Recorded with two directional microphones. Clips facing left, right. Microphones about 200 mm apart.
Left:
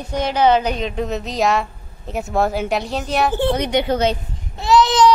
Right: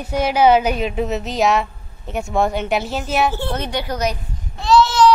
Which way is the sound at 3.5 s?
20° left (ahead or behind).